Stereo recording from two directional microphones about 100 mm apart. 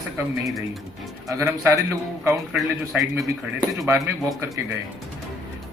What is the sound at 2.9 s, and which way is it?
Speech, 15° right (ahead or behind).